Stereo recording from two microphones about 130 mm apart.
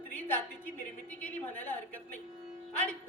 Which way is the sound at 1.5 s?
15° left (ahead or behind).